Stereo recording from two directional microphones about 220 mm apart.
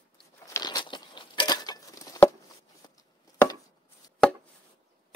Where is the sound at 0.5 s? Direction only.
15° left (ahead or behind).